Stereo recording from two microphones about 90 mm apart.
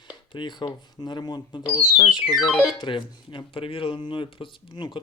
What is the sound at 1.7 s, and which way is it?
Speech, 65° left (ahead or behind).